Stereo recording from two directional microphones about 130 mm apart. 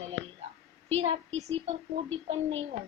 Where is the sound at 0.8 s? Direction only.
55° right (ahead or behind).